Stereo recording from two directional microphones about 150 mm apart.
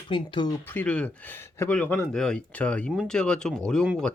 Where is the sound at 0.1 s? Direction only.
30° left (ahead or behind).